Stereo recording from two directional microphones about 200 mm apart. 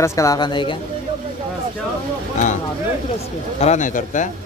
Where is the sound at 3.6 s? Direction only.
35° left (ahead or behind).